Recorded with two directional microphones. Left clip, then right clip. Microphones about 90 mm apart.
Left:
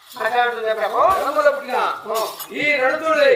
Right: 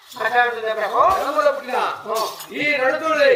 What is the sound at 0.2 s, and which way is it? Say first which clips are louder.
Speech: right 1 dB; 20° right (ahead or behind).